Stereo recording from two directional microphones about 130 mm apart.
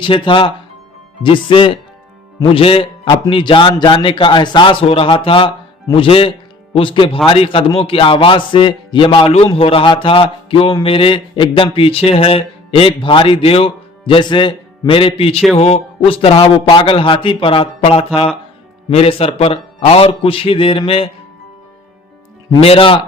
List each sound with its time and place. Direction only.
0.0 s a man's voice: 40° left (ahead or behind)
15.5 s speech: 55° left (ahead or behind)
22.6 s speech: 45° left (ahead or behind)